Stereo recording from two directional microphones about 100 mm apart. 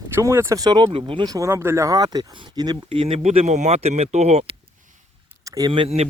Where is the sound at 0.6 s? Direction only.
40° right (ahead or behind).